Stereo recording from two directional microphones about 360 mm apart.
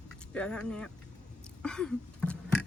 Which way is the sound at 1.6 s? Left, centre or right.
Centre.